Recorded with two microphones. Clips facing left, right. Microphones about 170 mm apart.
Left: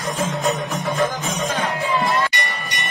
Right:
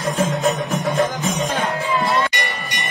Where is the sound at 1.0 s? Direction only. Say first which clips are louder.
Even; 20° right (ahead or behind).